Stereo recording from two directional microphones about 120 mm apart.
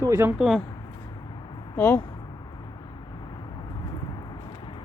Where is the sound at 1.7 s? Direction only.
20° left (ahead or behind).